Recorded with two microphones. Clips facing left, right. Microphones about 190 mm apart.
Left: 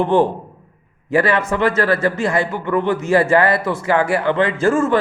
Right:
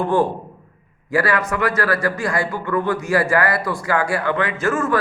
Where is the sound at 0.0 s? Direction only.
20° left (ahead or behind).